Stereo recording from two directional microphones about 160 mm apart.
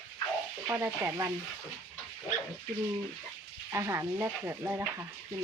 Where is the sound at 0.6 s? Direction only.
15° right (ahead or behind).